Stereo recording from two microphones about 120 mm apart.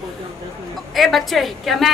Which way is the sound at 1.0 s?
Centre (ahead or behind).